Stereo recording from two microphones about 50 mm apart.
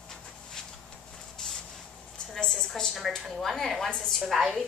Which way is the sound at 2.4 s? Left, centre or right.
Centre.